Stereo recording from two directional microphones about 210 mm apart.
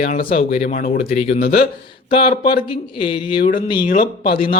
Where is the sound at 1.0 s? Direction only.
30° left (ahead or behind).